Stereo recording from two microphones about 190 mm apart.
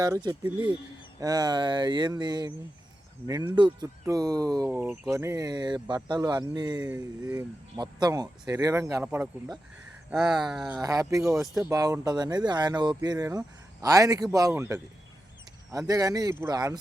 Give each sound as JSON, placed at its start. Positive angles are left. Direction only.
{"t": 0.0, "sound": "speech", "side_deg": -20}
{"t": 9.0, "sound": "a sound", "side_deg": -5}
{"t": 11.7, "sound": "speech", "side_deg": -20}